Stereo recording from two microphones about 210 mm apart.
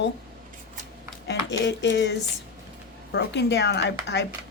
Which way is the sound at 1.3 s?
55° left (ahead or behind).